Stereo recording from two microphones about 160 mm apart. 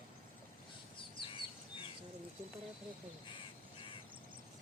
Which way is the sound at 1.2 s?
30° left (ahead or behind).